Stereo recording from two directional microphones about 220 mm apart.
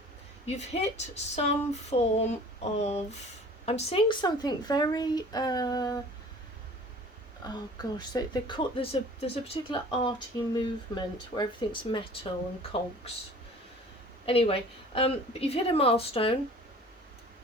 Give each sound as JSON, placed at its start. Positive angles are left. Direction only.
{"t": 0.4, "sound": "a woman's voice", "side_deg": 30}
{"t": 7.4, "sound": "speech", "side_deg": 20}
{"t": 14.3, "sound": "speech", "side_deg": 25}